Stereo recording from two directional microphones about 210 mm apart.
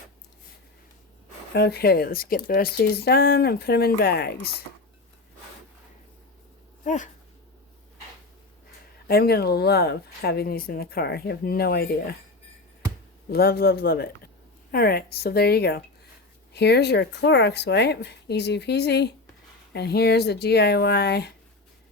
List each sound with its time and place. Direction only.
1.5 s speech: 50° left (ahead or behind)
6.8 s speech: 35° left (ahead or behind)
9.0 s speech: 50° left (ahead or behind)
13.3 s speech: 45° left (ahead or behind)